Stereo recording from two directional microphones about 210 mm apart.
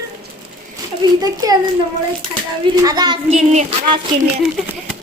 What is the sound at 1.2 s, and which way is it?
Speech, 15° right (ahead or behind).